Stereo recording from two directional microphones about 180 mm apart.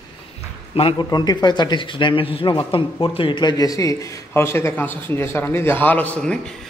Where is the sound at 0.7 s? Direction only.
30° left (ahead or behind).